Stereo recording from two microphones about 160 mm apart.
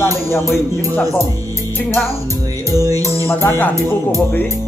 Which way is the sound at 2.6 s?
20° right (ahead or behind).